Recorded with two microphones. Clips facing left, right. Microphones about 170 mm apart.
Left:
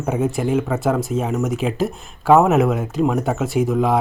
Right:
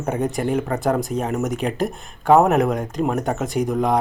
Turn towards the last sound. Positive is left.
turn(degrees=5)  # may be behind; listen again after turning